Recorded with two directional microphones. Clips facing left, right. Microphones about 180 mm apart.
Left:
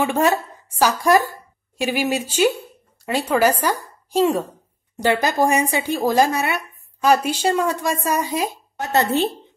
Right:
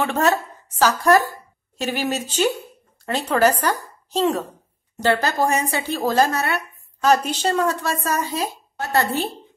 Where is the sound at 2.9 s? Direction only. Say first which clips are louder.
Left 2 dB; 10° left (ahead or behind).